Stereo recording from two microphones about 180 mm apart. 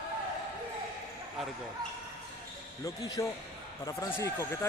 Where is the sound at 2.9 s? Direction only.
20° left (ahead or behind).